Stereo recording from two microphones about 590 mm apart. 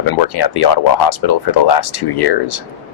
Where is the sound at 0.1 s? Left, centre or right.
Left.